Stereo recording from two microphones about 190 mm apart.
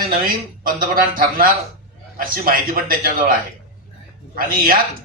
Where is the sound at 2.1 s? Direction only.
50° right (ahead or behind).